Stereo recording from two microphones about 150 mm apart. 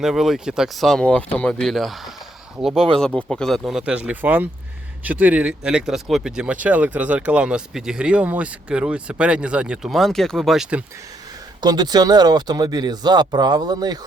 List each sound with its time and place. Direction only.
0.0 s speech: centre (ahead or behind)
11.6 s speech: 30° right (ahead or behind)